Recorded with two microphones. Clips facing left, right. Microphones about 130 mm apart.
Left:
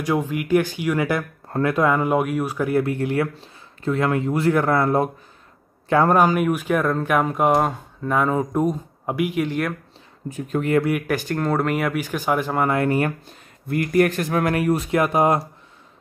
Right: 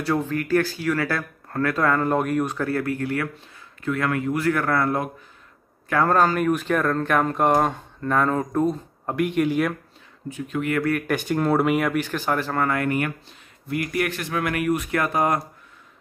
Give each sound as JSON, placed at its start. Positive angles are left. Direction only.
{"t": 0.0, "sound": "speech", "side_deg": 15}
{"t": 10.3, "sound": "speech", "side_deg": 40}
{"t": 10.9, "sound": "speech", "side_deg": 5}